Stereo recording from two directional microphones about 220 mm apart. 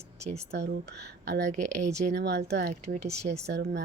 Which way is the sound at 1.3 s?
50° right (ahead or behind).